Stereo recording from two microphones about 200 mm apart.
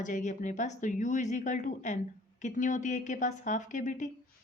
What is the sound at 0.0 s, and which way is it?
Speech, 40° left (ahead or behind).